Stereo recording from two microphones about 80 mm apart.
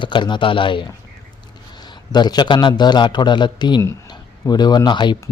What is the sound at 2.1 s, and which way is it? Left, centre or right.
A man's voice, left.